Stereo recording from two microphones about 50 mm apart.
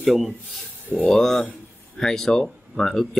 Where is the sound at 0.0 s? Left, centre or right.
Centre.